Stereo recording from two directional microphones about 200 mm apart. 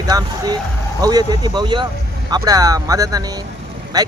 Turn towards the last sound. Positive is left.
turn(degrees=-20)  # may be behind; listen again after turning